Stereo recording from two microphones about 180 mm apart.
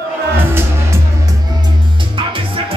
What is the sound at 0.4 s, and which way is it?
Music, 10° right (ahead or behind).